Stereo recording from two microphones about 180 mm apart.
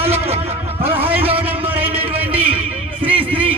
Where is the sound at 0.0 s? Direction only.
35° right (ahead or behind).